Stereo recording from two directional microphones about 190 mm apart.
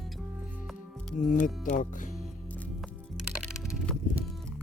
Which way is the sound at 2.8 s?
Centre (ahead or behind).